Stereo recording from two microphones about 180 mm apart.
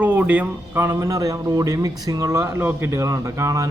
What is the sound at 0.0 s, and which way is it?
Speech, 10° right (ahead or behind).